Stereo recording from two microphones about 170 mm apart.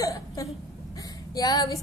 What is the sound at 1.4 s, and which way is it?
Female singing, 20° left (ahead or behind).